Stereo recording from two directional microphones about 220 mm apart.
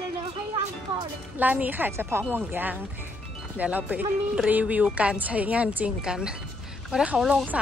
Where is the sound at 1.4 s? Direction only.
5° right (ahead or behind).